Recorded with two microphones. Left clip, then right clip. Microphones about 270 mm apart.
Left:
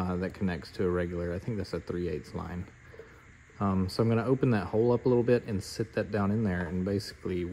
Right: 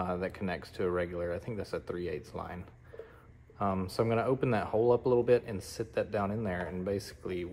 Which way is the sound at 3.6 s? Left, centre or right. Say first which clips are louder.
Left 1 dB; left.